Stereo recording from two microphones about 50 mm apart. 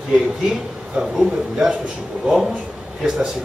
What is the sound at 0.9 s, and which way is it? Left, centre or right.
A man's voice, centre.